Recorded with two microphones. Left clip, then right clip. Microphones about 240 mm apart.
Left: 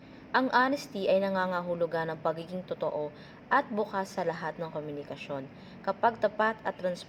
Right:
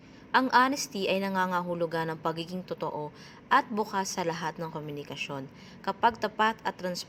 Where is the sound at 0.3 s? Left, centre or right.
Right.